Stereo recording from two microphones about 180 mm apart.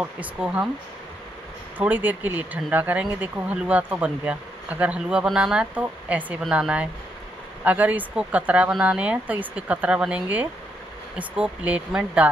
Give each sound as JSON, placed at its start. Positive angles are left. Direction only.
{"t": 0.0, "sound": "speech", "side_deg": -10}
{"t": 1.8, "sound": "speech", "side_deg": -10}